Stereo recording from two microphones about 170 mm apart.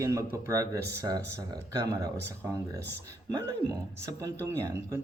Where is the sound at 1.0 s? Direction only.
20° right (ahead or behind).